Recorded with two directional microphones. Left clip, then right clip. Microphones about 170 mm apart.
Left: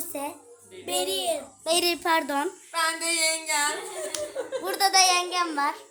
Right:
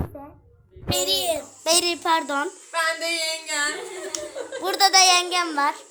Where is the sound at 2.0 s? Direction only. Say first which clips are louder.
Right 2 dB; 10° left (ahead or behind).